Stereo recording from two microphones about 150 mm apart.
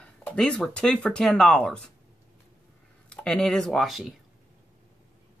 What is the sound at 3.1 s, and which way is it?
Speech, 5° left (ahead or behind).